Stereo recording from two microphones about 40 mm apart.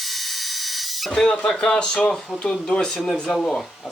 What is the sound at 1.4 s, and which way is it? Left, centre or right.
Speech, centre.